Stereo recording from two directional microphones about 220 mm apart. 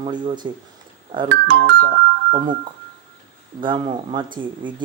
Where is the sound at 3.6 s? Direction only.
20° right (ahead or behind).